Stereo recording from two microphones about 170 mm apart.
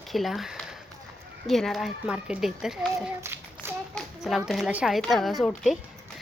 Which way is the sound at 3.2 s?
15° right (ahead or behind).